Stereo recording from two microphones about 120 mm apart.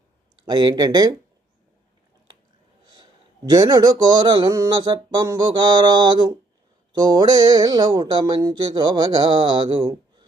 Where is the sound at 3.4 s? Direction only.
35° right (ahead or behind).